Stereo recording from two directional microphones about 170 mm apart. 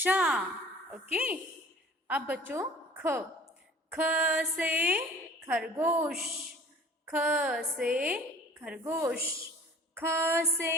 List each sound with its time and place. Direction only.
0.0 s music: 5° right (ahead or behind)
2.0 s a woman's voice: 10° right (ahead or behind)
3.9 s music: 10° right (ahead or behind)
7.1 s a sound: 10° right (ahead or behind)
8.8 s music: 15° right (ahead or behind)